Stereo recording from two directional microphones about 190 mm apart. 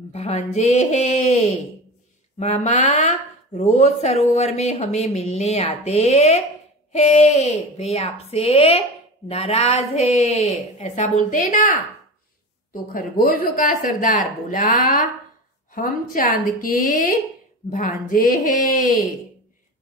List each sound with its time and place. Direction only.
0.1 s music: 35° left (ahead or behind)
0.5 s speech: 35° left (ahead or behind)
12.7 s speech: 50° left (ahead or behind)